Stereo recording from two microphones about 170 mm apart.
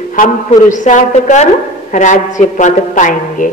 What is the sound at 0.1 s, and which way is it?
A woman's voice, 50° left (ahead or behind).